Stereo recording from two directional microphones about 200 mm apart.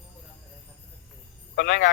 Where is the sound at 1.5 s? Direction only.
60° left (ahead or behind).